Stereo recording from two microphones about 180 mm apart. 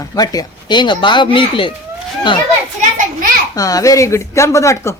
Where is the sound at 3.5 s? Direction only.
20° left (ahead or behind).